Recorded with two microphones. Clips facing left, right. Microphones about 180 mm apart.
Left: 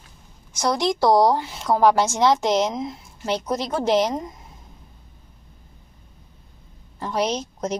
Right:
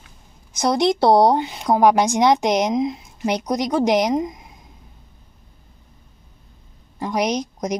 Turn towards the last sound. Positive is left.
turn(degrees=-15)  # may be behind; listen again after turning